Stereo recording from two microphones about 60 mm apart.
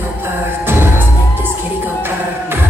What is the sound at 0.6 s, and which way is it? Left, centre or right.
Music, right.